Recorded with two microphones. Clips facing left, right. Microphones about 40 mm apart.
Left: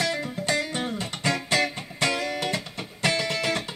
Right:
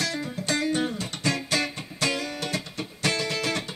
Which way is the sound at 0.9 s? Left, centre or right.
Left.